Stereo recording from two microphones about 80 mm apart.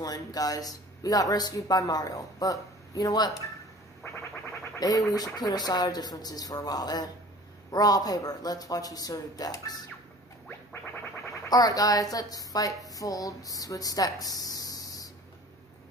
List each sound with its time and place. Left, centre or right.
0.0 s speech: left
4.0 s a sound: left
4.7 s speech: left
11.4 s a woman's voice: left